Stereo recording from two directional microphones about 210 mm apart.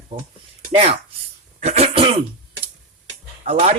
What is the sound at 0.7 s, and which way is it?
Speech, 25° right (ahead or behind).